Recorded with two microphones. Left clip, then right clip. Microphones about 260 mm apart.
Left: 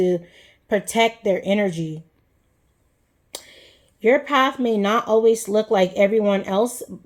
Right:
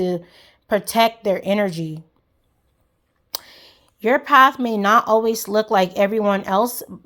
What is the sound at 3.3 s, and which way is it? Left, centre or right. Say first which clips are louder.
Speech: right 5 dB; right.